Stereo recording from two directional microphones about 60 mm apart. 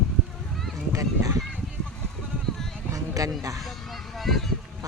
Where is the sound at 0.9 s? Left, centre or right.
Right.